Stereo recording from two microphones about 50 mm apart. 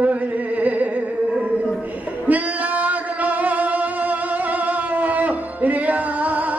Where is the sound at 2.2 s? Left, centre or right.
Right.